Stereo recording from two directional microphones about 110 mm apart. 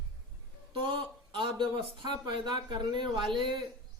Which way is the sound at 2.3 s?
45° right (ahead or behind).